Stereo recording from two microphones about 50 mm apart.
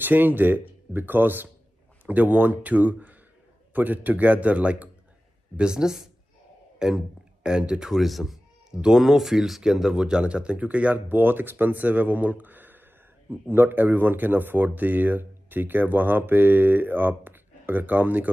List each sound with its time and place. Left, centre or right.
0.0 s speech: right
5.6 s speech: centre
7.9 s speech: centre; by 11.0 s right
11.1 s speech: right